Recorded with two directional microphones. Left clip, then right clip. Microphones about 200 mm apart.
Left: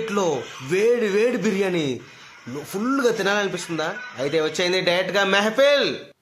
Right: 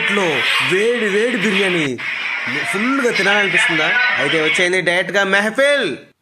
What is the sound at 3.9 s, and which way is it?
Speech, 45° right (ahead or behind).